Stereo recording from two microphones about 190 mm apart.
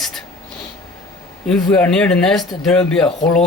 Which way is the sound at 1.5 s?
5° left (ahead or behind).